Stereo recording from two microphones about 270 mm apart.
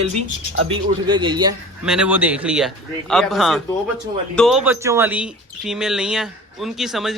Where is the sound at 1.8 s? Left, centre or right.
Centre.